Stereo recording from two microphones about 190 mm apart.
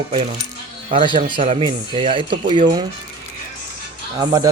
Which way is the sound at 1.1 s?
25° right (ahead or behind).